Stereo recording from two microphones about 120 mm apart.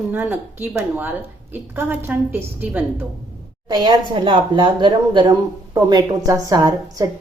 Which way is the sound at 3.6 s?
40° right (ahead or behind).